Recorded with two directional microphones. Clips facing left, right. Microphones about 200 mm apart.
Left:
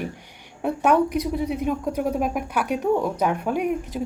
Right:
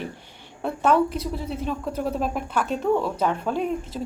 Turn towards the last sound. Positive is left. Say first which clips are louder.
# left 2 dB
turn(degrees=15)  # may be behind; listen again after turning